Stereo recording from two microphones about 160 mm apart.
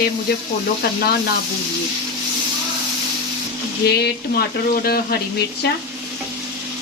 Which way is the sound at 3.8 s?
90° left.